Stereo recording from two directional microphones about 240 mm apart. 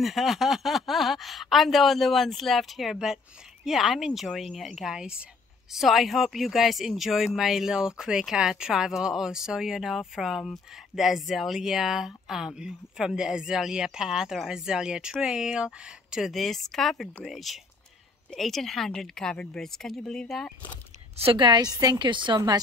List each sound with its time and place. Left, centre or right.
0.0 s speech: centre
21.2 s a woman's voice: right